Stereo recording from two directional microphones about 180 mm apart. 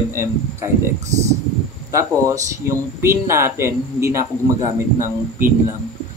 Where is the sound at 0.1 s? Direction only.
15° right (ahead or behind).